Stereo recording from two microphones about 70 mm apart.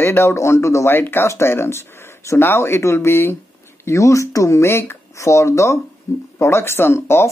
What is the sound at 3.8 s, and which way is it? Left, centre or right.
Speech, left.